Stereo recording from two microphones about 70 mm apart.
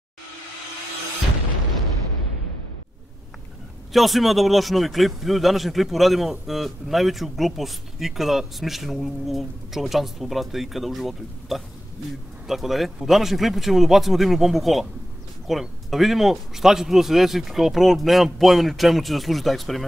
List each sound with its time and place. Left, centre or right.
3.9 s a man's voice: centre